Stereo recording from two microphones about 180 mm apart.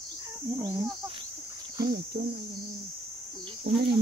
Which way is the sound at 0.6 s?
20° right (ahead or behind).